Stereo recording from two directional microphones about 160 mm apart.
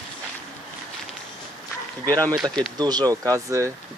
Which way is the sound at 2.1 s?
10° left (ahead or behind).